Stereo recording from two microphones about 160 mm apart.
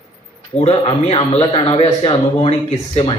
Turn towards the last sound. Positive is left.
turn(degrees=40)  # may be behind; listen again after turning